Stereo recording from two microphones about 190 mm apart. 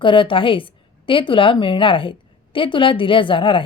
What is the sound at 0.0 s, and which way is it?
A woman's voice, 25° left (ahead or behind).